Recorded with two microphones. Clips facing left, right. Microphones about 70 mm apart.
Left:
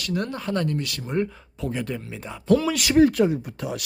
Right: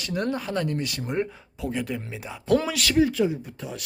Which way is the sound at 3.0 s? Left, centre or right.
Left.